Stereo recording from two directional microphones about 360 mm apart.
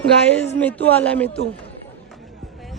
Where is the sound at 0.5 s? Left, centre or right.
Centre.